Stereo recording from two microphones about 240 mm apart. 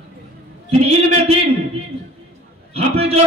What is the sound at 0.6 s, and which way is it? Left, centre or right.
Speech, right.